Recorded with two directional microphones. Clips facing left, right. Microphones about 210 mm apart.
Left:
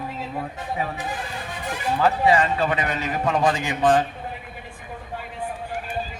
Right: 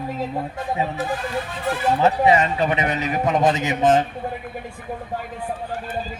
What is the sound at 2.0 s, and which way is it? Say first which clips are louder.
A man's voice: right 1 dB; 20° right (ahead or behind).